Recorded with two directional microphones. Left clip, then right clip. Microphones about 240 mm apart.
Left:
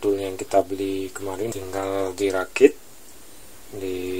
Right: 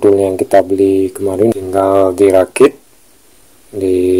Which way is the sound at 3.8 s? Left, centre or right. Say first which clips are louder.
Right 17 dB; right.